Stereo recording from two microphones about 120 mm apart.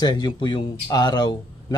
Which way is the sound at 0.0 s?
35° left (ahead or behind).